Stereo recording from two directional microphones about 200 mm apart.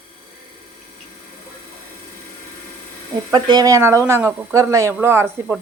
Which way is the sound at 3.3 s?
20° right (ahead or behind).